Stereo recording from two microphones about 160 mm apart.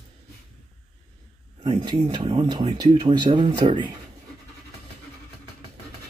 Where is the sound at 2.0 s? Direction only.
40° right (ahead or behind).